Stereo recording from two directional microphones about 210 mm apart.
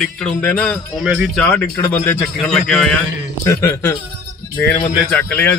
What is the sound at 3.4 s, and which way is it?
Speech, 15° left (ahead or behind).